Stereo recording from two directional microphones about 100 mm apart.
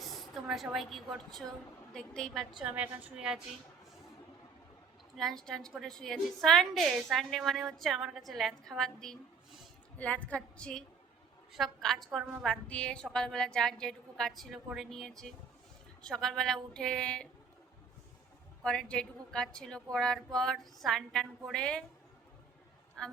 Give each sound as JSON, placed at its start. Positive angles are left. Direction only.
{"t": 0.0, "sound": "a woman's voice", "side_deg": 0}
{"t": 2.6, "sound": "a woman's voice", "side_deg": -15}
{"t": 5.1, "sound": "a woman's voice", "side_deg": 5}
{"t": 18.6, "sound": "a woman's voice", "side_deg": 10}